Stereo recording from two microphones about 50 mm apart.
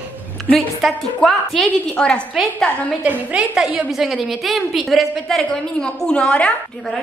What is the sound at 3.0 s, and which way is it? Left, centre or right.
Speech, right.